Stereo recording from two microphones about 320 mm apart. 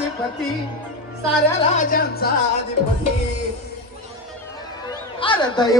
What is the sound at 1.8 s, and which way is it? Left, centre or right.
Speech, left.